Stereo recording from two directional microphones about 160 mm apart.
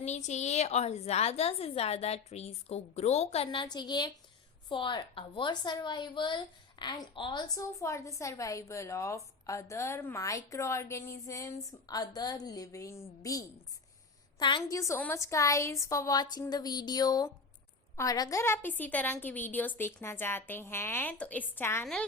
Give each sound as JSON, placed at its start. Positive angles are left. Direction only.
{"t": 0.0, "sound": "a woman's voice", "side_deg": 45}